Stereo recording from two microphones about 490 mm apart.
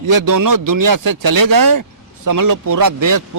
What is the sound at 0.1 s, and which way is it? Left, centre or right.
A man's voice, right.